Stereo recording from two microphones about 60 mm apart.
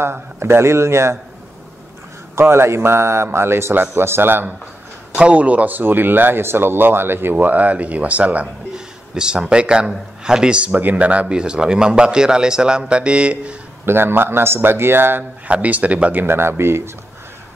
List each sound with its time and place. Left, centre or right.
0.0 s a man's voice: right
2.3 s a man's voice: right
5.1 s a man's voice: right
13.8 s speech: right
15.4 s speech: right